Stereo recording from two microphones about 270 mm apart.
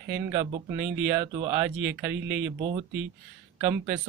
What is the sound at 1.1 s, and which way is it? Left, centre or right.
Speech, centre.